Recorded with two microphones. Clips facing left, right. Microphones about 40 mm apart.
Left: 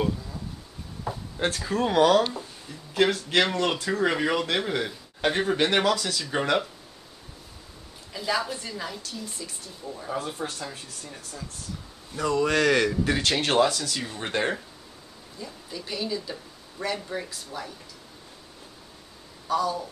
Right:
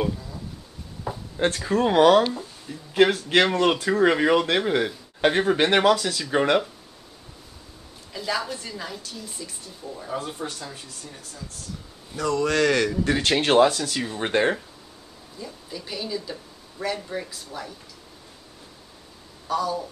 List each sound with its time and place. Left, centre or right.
1.0 s speech: centre
8.1 s speech: centre
12.2 s speech: centre
13.2 s speech: centre
15.3 s speech: centre
19.4 s speech: centre